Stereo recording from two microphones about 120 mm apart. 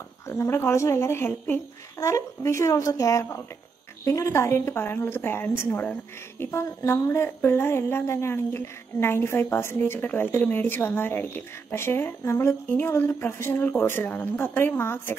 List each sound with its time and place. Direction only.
0.3 s speech: 20° left (ahead or behind)